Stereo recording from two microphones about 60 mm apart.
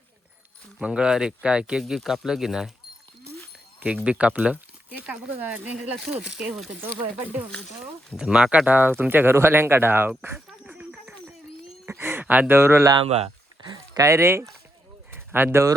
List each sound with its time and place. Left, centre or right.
0.8 s speech: centre
2.0 s speech: centre
3.8 s speech: centre
5.0 s speech: centre
8.1 s speech: centre; by 10.1 s right
11.9 s a sound: right
12.2 s speech: right
13.9 s speech: right
15.1 s bird: right